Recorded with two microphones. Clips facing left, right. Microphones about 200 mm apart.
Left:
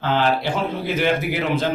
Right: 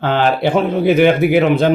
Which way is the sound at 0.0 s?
60° right (ahead or behind).